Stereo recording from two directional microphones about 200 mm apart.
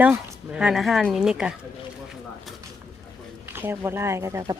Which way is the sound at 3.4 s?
10° right (ahead or behind).